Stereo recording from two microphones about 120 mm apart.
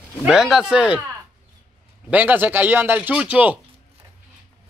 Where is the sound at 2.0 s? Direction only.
15° right (ahead or behind).